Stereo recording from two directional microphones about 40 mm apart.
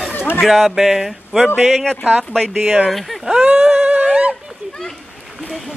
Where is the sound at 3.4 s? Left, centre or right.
Centre.